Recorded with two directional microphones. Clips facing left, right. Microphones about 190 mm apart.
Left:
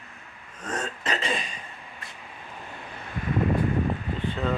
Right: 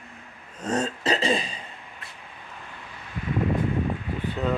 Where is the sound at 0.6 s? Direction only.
35° right (ahead or behind).